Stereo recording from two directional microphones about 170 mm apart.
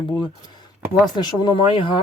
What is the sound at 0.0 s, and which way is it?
Speech, 25° left (ahead or behind).